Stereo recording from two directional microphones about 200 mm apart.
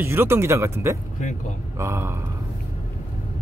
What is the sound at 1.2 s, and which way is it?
Speech, 40° left (ahead or behind).